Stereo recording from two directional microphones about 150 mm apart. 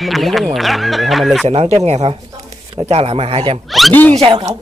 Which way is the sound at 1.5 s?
40° right (ahead or behind).